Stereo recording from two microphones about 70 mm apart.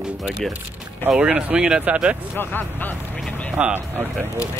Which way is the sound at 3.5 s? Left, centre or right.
Right.